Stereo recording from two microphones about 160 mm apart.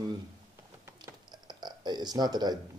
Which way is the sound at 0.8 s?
25° right (ahead or behind).